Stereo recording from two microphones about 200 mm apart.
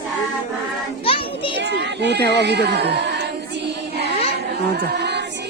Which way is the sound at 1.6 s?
60° right (ahead or behind).